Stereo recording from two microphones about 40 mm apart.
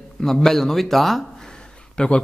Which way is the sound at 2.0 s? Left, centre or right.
Left.